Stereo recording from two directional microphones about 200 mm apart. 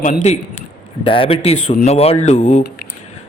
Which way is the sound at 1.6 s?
40° left (ahead or behind).